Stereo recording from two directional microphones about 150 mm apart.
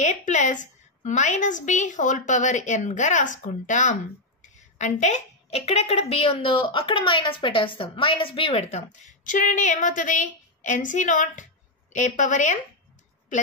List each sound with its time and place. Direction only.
0.0 s a woman's voice: 50° left (ahead or behind)
9.0 s a woman's voice: 60° left (ahead or behind)